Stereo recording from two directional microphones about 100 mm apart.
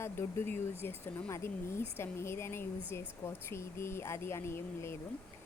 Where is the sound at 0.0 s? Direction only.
25° left (ahead or behind).